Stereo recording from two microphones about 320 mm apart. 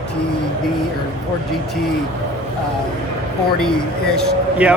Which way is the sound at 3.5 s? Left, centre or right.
Centre.